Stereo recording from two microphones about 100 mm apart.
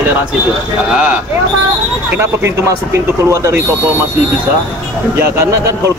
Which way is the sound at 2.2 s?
25° right (ahead or behind).